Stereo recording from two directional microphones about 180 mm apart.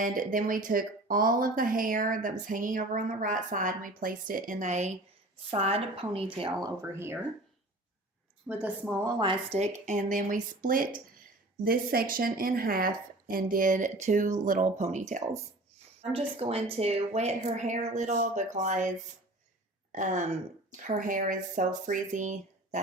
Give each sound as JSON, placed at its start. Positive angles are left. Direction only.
{"t": 0.0, "sound": "speech", "side_deg": -50}
{"t": 8.6, "sound": "speech", "side_deg": -10}
{"t": 9.1, "sound": "speech", "side_deg": -25}
{"t": 19.9, "sound": "speech", "side_deg": -45}